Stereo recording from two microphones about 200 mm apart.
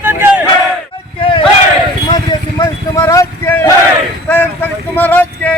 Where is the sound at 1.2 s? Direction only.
25° left (ahead or behind).